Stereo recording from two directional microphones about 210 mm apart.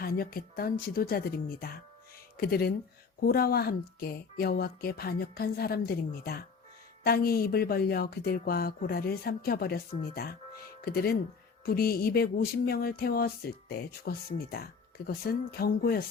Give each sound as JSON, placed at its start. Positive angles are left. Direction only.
{"t": 0.0, "sound": "music", "side_deg": 45}